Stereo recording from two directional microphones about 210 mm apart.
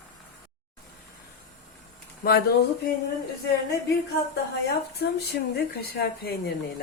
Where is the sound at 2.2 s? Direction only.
50° left (ahead or behind).